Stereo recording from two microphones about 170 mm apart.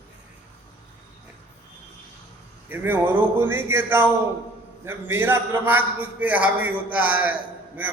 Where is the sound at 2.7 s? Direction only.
10° right (ahead or behind).